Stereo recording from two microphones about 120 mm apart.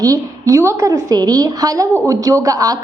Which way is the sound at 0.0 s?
25° right (ahead or behind).